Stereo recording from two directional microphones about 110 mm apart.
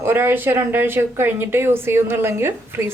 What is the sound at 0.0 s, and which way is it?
A woman's voice, 20° right (ahead or behind).